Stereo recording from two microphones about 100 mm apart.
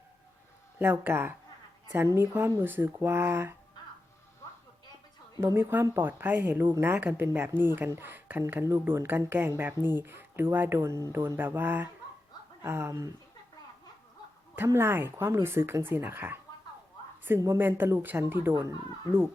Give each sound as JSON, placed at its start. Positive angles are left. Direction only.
{"t": 0.8, "sound": "speech", "side_deg": -20}
{"t": 5.4, "sound": "speech", "side_deg": -25}
{"t": 14.5, "sound": "speech", "side_deg": -25}
{"t": 17.6, "sound": "speech", "side_deg": -20}